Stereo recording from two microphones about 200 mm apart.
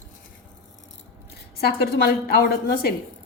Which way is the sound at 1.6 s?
55° left (ahead or behind).